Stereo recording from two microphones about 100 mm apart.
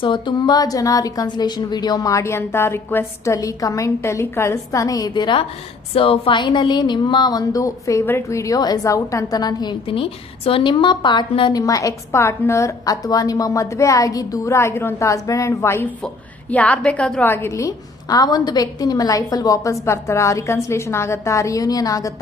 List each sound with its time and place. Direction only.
0.0 s a woman's voice: 55° left (ahead or behind)
5.9 s a woman's voice: 65° left (ahead or behind); by 9.7 s 45° left (ahead or behind)
9.8 s speech: 65° left (ahead or behind)
11.6 s a woman's voice: 35° left (ahead or behind)
16.5 s a woman's voice: 15° left (ahead or behind)
17.5 s a woman's voice: 35° left (ahead or behind)